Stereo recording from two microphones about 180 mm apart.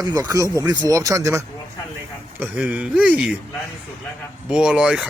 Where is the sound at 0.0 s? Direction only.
20° right (ahead or behind); by 3.2 s 5° right (ahead or behind).